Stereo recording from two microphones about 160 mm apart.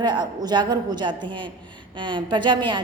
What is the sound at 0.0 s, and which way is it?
A woman's voice, 25° right (ahead or behind).